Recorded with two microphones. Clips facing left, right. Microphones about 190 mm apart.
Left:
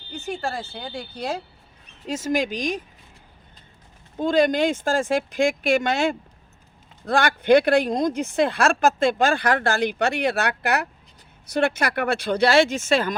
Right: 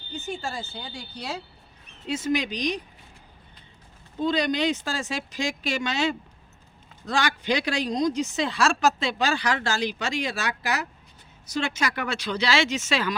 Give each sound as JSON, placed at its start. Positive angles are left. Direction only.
{"t": 0.1, "sound": "a sound", "side_deg": 55}
{"t": 0.7, "sound": "speech", "side_deg": 55}
{"t": 4.2, "sound": "speech", "side_deg": 50}